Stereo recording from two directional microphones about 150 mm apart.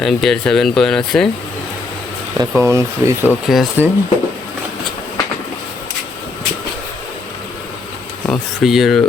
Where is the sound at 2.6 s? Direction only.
20° right (ahead or behind).